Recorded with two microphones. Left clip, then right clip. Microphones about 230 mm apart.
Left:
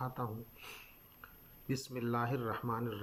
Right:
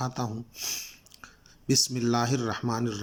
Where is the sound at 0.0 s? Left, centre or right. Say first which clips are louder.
Right 8 dB; right.